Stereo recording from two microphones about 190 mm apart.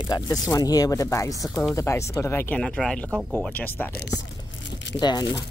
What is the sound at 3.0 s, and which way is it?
Speech, 10° right (ahead or behind).